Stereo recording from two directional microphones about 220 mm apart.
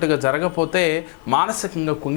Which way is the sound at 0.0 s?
20° left (ahead or behind).